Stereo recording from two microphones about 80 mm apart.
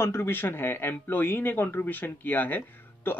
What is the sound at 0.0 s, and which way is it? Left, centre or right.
A man's voice, left.